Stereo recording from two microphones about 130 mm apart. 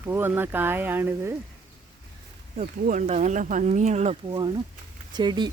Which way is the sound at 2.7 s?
90° right.